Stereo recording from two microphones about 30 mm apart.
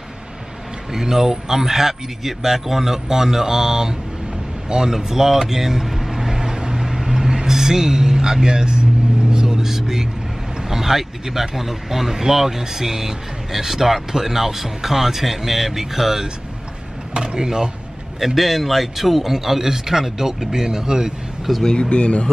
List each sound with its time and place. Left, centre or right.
0.9 s a man's voice: centre
4.9 s vehicle: centre
10.6 s speech: centre
17.1 s speech: right
18.2 s a man's voice: centre; by 21.1 s right
21.7 s speech: left